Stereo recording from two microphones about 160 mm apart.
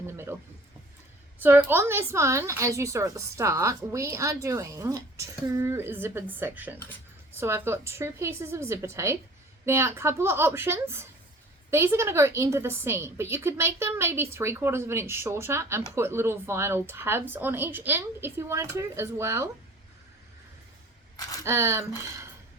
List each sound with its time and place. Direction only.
0.1 s a sound: 15° right (ahead or behind)
1.4 s a woman's voice: 10° right (ahead or behind)
21.4 s a woman's voice: 15° right (ahead or behind)